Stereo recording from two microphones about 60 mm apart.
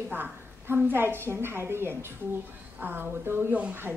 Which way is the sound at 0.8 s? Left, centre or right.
Right.